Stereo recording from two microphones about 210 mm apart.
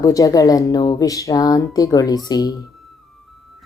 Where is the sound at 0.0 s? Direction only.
15° left (ahead or behind).